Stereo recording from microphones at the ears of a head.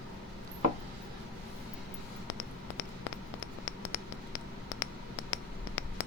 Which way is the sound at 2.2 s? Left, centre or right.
Left.